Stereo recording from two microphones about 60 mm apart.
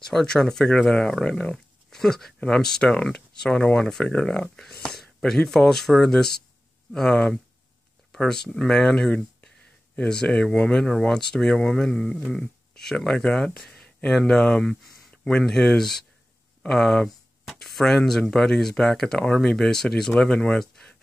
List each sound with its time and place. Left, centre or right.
0.0 s speech: centre